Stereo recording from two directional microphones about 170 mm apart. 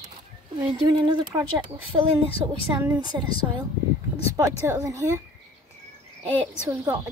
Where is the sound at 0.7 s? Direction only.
25° right (ahead or behind).